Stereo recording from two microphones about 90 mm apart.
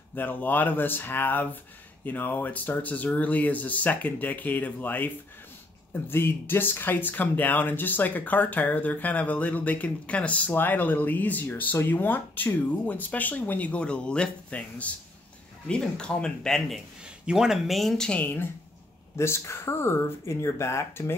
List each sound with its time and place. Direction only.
0.1 s speech: 20° left (ahead or behind)
18.2 s speech: 25° left (ahead or behind)